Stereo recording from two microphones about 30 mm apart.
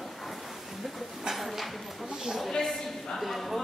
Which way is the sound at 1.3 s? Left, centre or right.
Centre.